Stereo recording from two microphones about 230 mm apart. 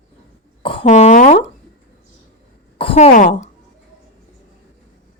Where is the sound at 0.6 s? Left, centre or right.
Left.